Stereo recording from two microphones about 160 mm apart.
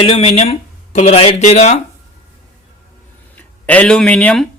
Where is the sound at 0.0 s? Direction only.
35° left (ahead or behind).